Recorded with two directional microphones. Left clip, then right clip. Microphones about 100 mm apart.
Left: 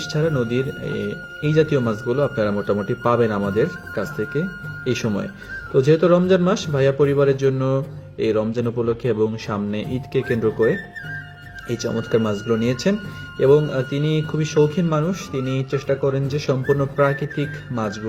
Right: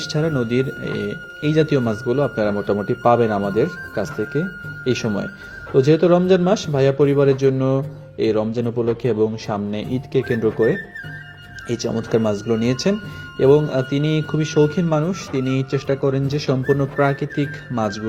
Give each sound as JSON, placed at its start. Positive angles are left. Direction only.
{"t": 0.0, "sound": "speech", "side_deg": -35}